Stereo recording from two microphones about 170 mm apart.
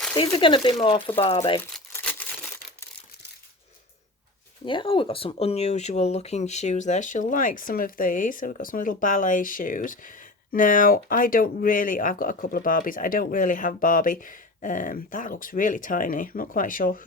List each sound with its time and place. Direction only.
0.3 s speech: 30° left (ahead or behind)
1.9 s crumpling: 10° left (ahead or behind)
4.6 s speech: 30° left (ahead or behind); by 17.0 s 55° left (ahead or behind)